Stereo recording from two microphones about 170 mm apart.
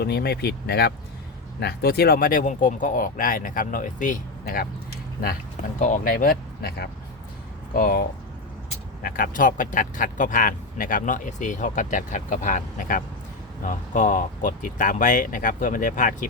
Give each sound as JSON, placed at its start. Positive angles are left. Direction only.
{"t": 0.0, "sound": "speech", "side_deg": 70}
{"t": 5.8, "sound": "speech", "side_deg": 50}
{"t": 9.0, "sound": "speech", "side_deg": 55}